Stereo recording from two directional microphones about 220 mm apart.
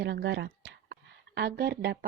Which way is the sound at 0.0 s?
50° right (ahead or behind).